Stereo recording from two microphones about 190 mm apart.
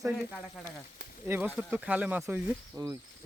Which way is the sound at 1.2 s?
10° right (ahead or behind).